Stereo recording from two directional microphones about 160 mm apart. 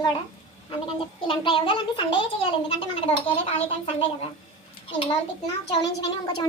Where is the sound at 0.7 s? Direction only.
35° left (ahead or behind).